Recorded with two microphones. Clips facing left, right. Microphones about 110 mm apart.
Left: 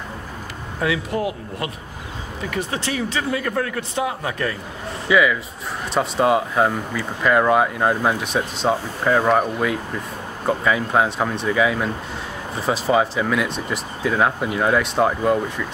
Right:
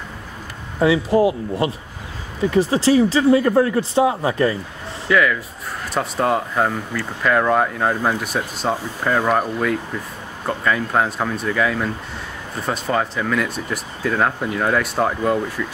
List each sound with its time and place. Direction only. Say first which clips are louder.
0.7 s speech: right 7 dB; 25° right (ahead or behind)
5.0 s speech: even; 5° left (ahead or behind)